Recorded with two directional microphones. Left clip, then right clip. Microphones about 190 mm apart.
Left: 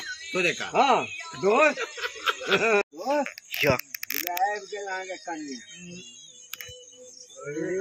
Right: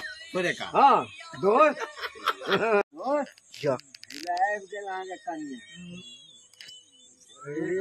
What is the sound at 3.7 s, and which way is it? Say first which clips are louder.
Mechanisms: left 7 dB; 10° left (ahead or behind).